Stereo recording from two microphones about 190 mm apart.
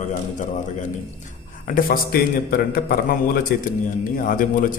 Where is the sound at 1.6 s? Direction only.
50° left (ahead or behind).